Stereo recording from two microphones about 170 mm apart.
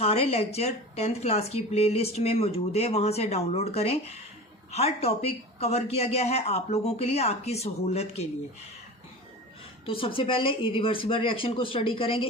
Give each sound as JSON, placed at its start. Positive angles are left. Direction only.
{"t": 0.0, "sound": "speech", "side_deg": 35}
{"t": 9.8, "sound": "speech", "side_deg": 30}